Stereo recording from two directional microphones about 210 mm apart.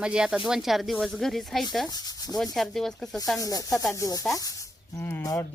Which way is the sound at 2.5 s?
Centre (ahead or behind).